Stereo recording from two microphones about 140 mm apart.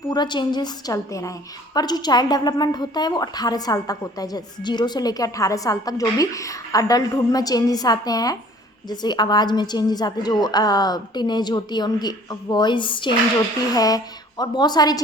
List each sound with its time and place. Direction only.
0.1 s a woman's voice: 30° left (ahead or behind)